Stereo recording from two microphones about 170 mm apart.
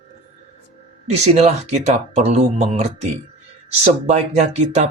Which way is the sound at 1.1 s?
40° right (ahead or behind).